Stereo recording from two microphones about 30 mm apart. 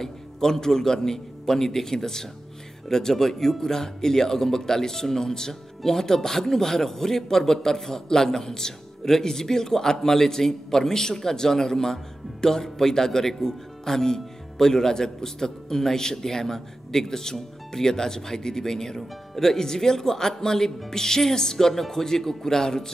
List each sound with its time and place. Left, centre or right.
0.0 s a man's voice: centre